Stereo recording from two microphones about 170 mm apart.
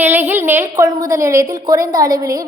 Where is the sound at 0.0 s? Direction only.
10° right (ahead or behind).